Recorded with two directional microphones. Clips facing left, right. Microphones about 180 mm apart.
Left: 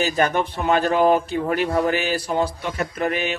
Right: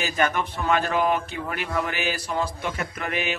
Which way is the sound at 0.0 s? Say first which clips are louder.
Left 4 dB; 35° left (ahead or behind).